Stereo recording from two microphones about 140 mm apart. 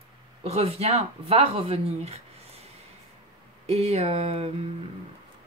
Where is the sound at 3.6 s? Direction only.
50° right (ahead or behind).